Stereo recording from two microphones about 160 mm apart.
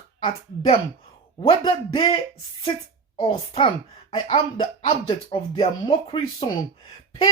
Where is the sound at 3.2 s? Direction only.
35° left (ahead or behind).